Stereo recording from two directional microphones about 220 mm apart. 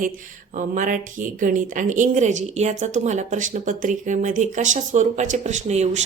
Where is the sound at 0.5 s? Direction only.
35° right (ahead or behind).